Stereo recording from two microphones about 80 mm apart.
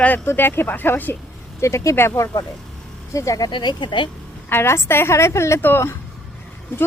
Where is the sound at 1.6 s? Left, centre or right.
Left.